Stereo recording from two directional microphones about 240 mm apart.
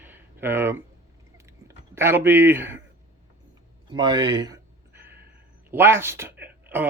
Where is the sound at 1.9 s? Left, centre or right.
Centre.